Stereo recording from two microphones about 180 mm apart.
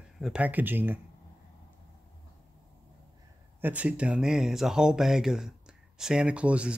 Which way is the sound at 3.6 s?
10° right (ahead or behind).